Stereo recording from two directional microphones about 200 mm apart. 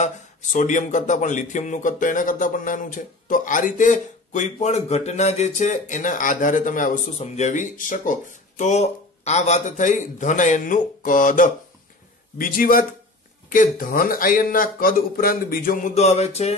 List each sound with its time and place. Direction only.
0.0 s speech: 40° left (ahead or behind)